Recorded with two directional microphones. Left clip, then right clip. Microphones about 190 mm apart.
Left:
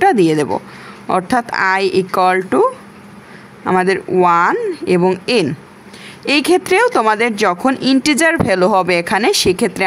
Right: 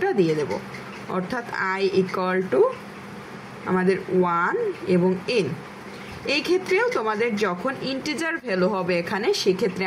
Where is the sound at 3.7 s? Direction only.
45° left (ahead or behind).